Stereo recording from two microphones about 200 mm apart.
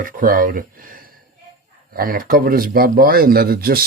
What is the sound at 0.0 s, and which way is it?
Speech, 45° right (ahead or behind).